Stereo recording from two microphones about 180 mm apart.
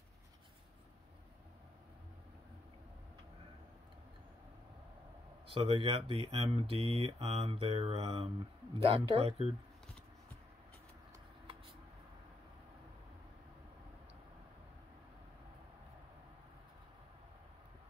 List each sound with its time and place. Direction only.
5.5 s speech: 30° right (ahead or behind)